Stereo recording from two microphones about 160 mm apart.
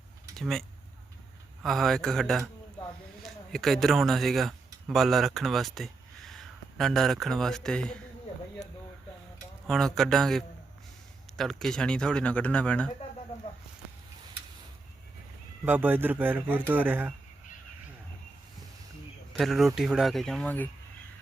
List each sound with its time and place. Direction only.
0.3 s speech: centre (ahead or behind)
1.6 s speech: centre (ahead or behind)
9.6 s speech: 5° left (ahead or behind)
15.6 s a man's voice: 10° right (ahead or behind)
19.3 s speech: centre (ahead or behind)